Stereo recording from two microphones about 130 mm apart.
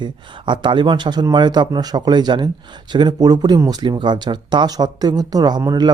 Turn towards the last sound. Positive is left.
turn(degrees=-30)  # may be behind; listen again after turning